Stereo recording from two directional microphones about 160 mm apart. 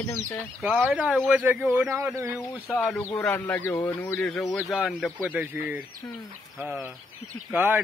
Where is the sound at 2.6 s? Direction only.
10° left (ahead or behind); by 5.8 s 10° right (ahead or behind).